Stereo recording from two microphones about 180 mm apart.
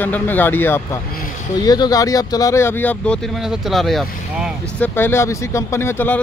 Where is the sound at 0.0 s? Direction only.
10° left (ahead or behind).